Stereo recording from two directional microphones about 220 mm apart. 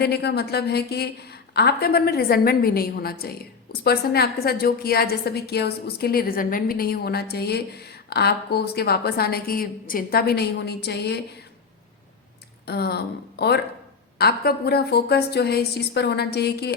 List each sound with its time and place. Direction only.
0.0 s a woman's voice: 45° left (ahead or behind)
12.6 s a woman's voice: 50° left (ahead or behind)